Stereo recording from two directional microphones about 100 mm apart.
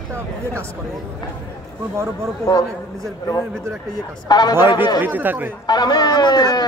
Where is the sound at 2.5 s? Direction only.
40° left (ahead or behind).